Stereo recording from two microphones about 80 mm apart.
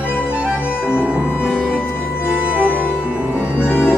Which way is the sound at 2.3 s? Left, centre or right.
Centre.